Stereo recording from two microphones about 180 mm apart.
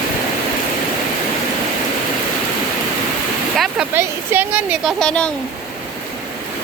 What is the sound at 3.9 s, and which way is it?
Speech, 10° right (ahead or behind).